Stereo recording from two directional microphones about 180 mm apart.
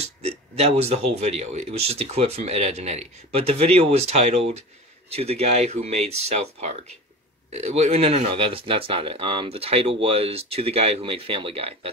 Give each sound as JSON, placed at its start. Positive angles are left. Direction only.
{"t": 0.0, "sound": "speech", "side_deg": -35}